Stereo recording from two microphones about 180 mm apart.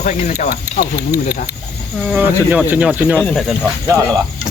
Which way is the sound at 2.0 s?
10° right (ahead or behind).